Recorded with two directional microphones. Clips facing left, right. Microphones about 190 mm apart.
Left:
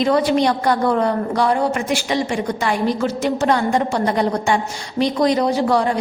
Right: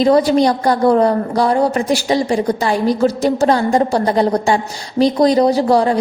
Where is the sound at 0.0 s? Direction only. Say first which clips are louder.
Right 4 dB; 35° right (ahead or behind).